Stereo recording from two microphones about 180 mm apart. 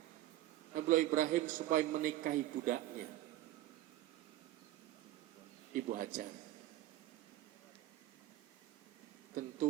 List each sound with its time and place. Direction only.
0.7 s a man's voice: 50° right (ahead or behind)
5.7 s speech: 50° right (ahead or behind)
9.4 s a sound: 50° right (ahead or behind)